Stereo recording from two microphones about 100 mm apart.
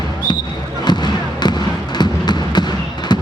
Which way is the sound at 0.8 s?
45° left (ahead or behind).